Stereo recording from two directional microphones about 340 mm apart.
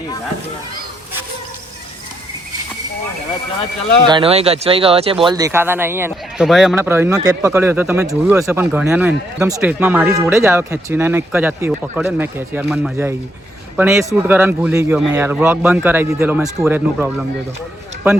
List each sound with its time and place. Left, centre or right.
4.0 s a man's voice: centre